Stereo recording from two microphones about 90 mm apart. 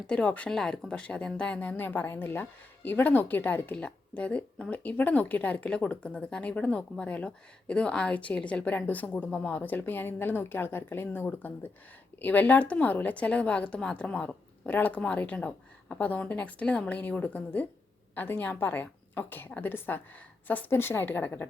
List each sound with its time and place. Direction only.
0.1 s a woman's voice: 15° left (ahead or behind)